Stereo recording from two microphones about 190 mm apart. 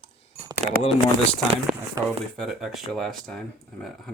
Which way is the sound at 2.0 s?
20° right (ahead or behind).